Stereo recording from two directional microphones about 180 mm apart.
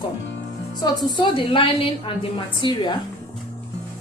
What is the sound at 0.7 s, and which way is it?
A woman's voice, 20° left (ahead or behind).